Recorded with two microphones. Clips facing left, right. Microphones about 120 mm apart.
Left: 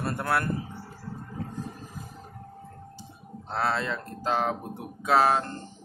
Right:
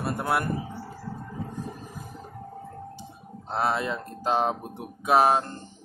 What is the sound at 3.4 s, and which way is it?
Speech, 20° right (ahead or behind).